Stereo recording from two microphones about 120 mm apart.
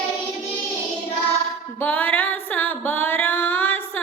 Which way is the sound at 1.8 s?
15° left (ahead or behind).